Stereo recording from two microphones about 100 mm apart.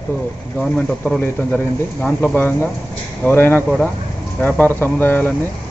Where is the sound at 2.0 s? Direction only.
15° left (ahead or behind).